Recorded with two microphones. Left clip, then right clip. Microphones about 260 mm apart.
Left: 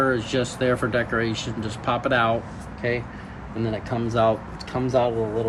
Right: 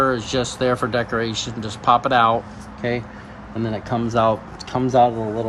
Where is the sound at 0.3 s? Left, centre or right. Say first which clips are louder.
Right 3 dB; centre.